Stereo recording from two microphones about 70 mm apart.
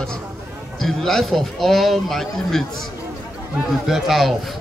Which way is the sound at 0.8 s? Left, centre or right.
Centre.